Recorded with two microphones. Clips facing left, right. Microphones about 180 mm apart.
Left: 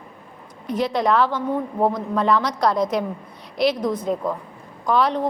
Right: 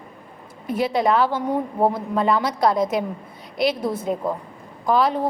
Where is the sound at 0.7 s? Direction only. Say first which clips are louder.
Even; 5° right (ahead or behind).